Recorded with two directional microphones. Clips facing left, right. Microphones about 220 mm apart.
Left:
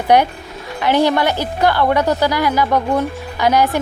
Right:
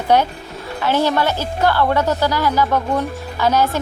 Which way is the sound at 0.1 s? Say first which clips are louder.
Left 2 dB; 15° left (ahead or behind).